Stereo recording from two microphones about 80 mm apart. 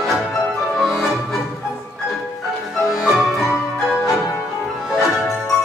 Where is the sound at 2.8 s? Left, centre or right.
Centre.